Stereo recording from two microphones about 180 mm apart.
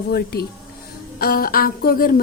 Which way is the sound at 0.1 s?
60° left (ahead or behind).